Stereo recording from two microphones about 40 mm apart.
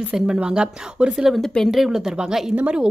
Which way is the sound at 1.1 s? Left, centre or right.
Centre.